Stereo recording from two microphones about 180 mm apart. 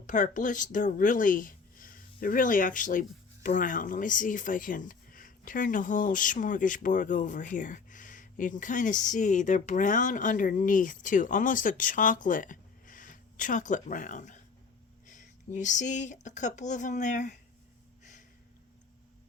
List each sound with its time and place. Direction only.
0.1 s speech: 45° left (ahead or behind)
15.0 s a sound: 45° left (ahead or behind)
15.5 s speech: 45° left (ahead or behind)